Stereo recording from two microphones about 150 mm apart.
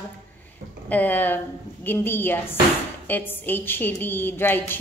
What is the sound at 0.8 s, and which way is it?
A woman's voice, 10° left (ahead or behind).